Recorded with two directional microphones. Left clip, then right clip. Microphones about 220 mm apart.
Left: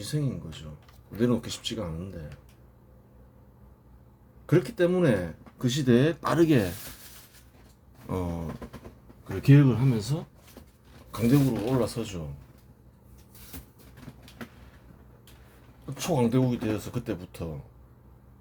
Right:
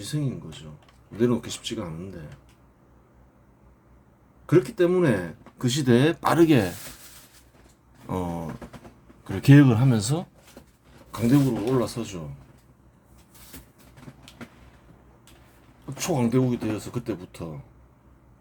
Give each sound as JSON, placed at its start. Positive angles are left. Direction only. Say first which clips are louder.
{"t": 0.0, "sound": "speech", "louder": "right 1 dB", "side_deg": -5}
{"t": 4.4, "sound": "speech", "louder": "right 4 dB", "side_deg": -5}
{"t": 8.0, "sound": "speech", "louder": "right 3 dB", "side_deg": -10}
{"t": 9.2, "sound": "speech", "louder": "right 5 dB", "side_deg": -35}
{"t": 11.1, "sound": "speech", "louder": "right 2 dB", "side_deg": -5}
{"t": 16.0, "sound": "speech", "louder": "right 1 dB", "side_deg": -5}